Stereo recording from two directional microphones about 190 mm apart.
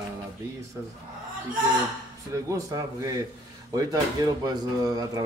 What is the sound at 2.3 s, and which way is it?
A man's voice, 15° right (ahead or behind).